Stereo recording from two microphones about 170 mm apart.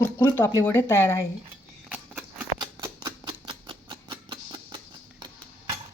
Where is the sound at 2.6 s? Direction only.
25° right (ahead or behind).